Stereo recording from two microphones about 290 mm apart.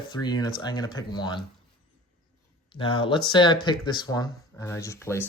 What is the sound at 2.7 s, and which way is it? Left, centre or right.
Speech, centre.